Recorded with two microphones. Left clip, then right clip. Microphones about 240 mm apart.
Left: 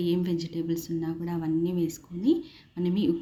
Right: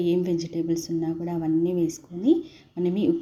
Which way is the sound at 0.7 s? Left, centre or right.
Left.